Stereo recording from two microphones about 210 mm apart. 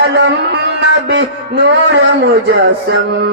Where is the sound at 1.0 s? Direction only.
55° right (ahead or behind).